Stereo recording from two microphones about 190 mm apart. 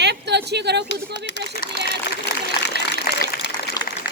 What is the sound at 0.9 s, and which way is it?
Speech, 65° left (ahead or behind).